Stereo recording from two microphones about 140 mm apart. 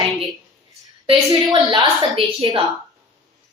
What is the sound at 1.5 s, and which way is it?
A woman's voice, 35° right (ahead or behind).